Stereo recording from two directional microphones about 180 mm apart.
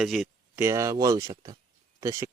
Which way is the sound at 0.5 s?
15° right (ahead or behind).